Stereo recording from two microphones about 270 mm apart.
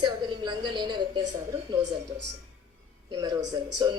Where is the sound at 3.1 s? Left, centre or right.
Centre.